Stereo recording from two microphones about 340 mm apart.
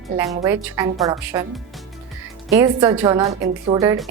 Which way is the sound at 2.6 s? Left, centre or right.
Centre.